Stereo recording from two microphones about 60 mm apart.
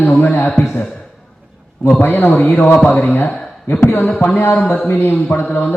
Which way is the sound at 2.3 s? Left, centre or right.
Left.